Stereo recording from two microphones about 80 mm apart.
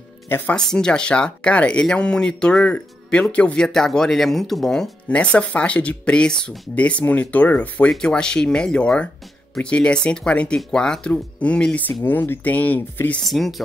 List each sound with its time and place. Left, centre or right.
0.6 s speech: centre
12.0 s speech: left
13.2 s speech: centre